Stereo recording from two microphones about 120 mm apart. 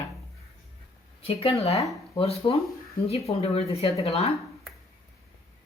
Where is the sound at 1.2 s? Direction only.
55° left (ahead or behind).